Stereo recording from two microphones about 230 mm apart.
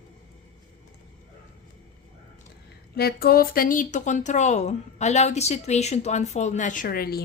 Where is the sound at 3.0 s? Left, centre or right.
Left.